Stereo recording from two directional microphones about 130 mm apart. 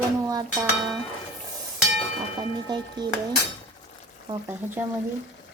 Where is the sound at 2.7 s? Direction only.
35° right (ahead or behind).